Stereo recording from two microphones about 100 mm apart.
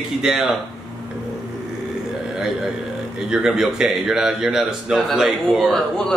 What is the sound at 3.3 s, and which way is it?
Speech, 5° right (ahead or behind).